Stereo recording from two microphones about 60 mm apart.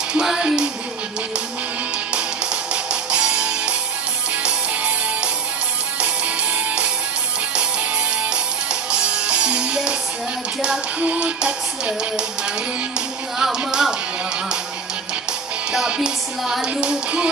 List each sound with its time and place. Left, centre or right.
0.1 s music: centre
2.1 s music: centre
8.9 s music: centre
11.0 s music: right
13.4 s music: centre
15.7 s music: centre